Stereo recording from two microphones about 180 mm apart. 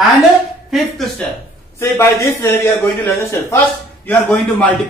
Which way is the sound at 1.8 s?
15° left (ahead or behind).